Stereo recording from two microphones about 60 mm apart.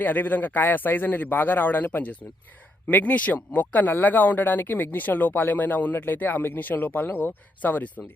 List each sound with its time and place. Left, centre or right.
0.0 s speech: left